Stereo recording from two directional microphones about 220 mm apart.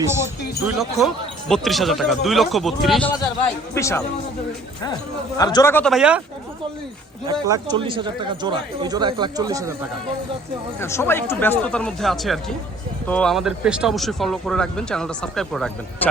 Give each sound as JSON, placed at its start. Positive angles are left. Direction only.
{"t": 0.1, "sound": "speech", "side_deg": -10}
{"t": 0.8, "sound": "speech", "side_deg": 0}
{"t": 5.4, "sound": "speech", "side_deg": 15}
{"t": 7.3, "sound": "speech", "side_deg": -15}
{"t": 10.8, "sound": "speech", "side_deg": 10}